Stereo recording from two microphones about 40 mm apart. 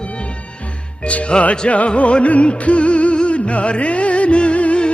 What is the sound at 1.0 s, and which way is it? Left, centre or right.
Music, left.